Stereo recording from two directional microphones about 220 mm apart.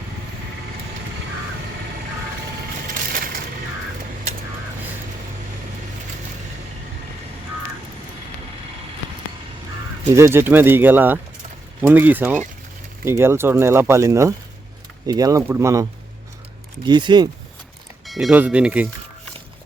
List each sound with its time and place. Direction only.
10.1 s speech: 10° right (ahead or behind)
18.0 s speech: centre (ahead or behind)